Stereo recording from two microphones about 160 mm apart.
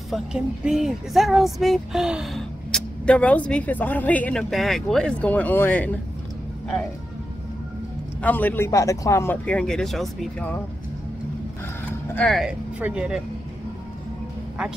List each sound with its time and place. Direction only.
0.1 s speech: 5° right (ahead or behind)
8.2 s speech: 10° left (ahead or behind)
12.1 s speech: 10° left (ahead or behind)
12.4 s speech: 5° right (ahead or behind)
14.6 s speech: 5° right (ahead or behind)